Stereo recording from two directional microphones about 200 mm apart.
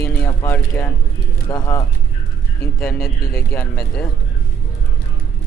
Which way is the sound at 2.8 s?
15° left (ahead or behind).